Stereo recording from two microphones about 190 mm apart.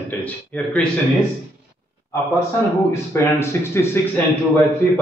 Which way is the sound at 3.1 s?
15° left (ahead or behind).